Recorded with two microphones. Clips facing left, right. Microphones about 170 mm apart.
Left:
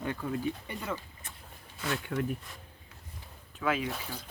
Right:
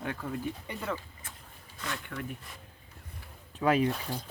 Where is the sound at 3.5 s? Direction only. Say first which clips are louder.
Right 5 dB; 40° right (ahead or behind).